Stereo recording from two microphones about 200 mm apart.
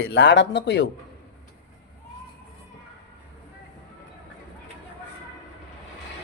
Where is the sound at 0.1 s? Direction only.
60° left (ahead or behind).